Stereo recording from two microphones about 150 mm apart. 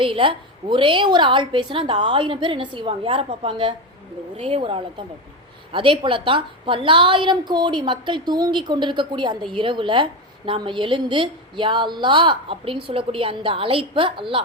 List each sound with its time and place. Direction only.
0.0 s a woman's voice: 35° right (ahead or behind)